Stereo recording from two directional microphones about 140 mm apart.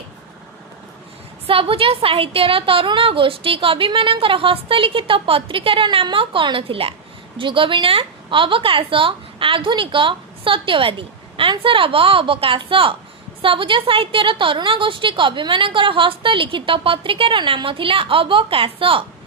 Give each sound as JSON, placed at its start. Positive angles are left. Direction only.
{"t": 1.5, "sound": "a woman's voice", "side_deg": -40}